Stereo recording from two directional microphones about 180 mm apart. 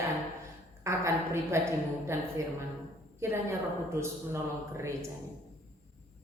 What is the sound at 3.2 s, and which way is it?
Speech, 15° right (ahead or behind).